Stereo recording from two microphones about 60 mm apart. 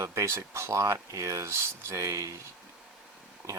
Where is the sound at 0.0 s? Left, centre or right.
Right.